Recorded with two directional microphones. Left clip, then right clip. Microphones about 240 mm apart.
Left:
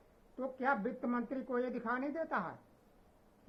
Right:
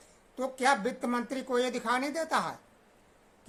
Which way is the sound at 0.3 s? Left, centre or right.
Right.